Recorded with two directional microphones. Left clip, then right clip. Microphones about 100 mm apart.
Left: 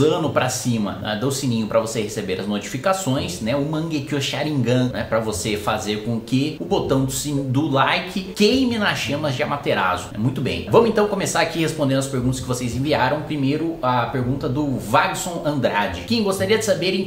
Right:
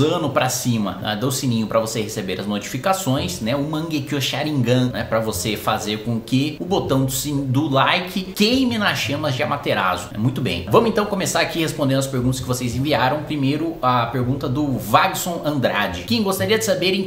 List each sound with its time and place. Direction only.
0.0 s speech: 15° right (ahead or behind)